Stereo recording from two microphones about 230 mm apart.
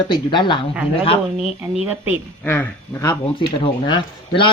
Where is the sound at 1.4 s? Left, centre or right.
Centre.